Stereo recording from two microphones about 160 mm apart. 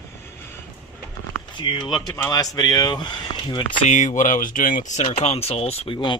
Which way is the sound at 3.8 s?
50° left (ahead or behind).